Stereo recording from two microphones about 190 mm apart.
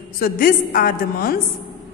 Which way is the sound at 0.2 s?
45° left (ahead or behind).